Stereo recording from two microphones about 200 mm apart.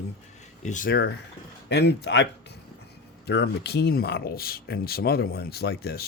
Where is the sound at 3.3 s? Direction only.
55° left (ahead or behind).